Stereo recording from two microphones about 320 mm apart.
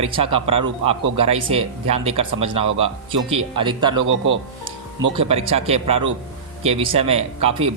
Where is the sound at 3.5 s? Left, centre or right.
Centre.